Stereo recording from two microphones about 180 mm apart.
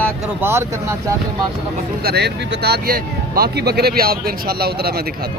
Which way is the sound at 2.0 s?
65° right (ahead or behind).